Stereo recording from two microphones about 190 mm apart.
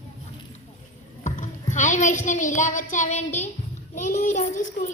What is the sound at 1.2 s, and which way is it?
A child's voice, 40° left (ahead or behind).